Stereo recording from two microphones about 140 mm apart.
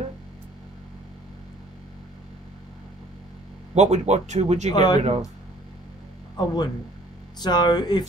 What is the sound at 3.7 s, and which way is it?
Speech, 55° right (ahead or behind).